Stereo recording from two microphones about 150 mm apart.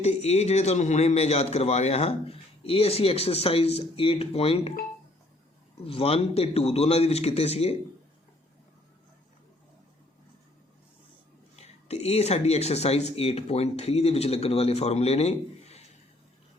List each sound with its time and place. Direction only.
0.0 s a man's voice: 45° left (ahead or behind)
5.7 s a man's voice: 40° left (ahead or behind)
11.5 s a man's voice: 45° left (ahead or behind)